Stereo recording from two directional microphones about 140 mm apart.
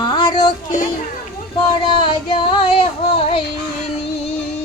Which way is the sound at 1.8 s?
40° left (ahead or behind).